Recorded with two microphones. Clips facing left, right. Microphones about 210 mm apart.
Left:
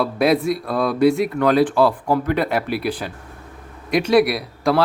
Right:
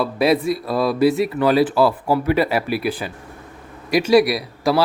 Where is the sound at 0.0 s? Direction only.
Centre (ahead or behind).